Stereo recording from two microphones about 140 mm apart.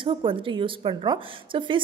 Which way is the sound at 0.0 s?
35° right (ahead or behind).